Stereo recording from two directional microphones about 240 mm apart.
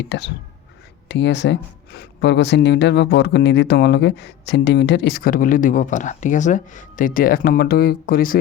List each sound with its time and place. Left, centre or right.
0.0 s speech: left